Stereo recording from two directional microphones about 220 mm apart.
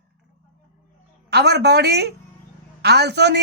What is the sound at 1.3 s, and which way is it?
A woman's voice, 50° right (ahead or behind).